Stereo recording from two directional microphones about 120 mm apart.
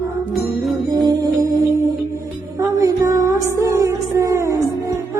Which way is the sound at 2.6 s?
30° right (ahead or behind).